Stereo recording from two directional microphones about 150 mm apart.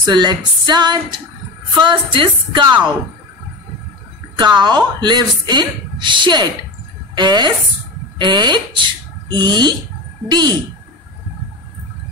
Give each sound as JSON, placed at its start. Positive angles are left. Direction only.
{"t": 0.0, "sound": "a woman's voice", "side_deg": -30}
{"t": 4.4, "sound": "a woman's voice", "side_deg": -30}